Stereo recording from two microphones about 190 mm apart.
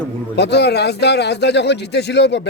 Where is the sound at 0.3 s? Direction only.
60° left (ahead or behind).